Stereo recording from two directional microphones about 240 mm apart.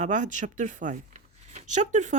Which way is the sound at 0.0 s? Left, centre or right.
Right.